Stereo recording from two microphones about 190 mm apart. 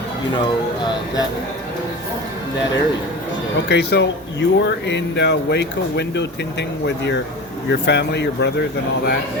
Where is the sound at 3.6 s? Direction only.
60° left (ahead or behind).